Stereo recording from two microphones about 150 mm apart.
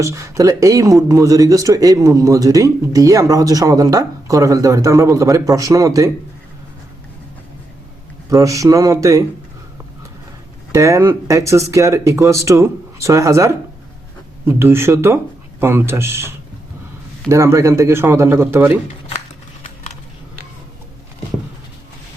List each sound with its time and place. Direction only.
0.0 s speech: 20° right (ahead or behind)
8.3 s speech: 20° right (ahead or behind)
10.7 s speech: 20° right (ahead or behind)